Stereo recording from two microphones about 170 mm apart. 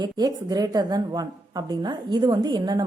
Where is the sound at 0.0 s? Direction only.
25° right (ahead or behind).